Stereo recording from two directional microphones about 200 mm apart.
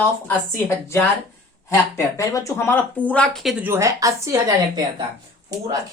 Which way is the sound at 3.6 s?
15° right (ahead or behind).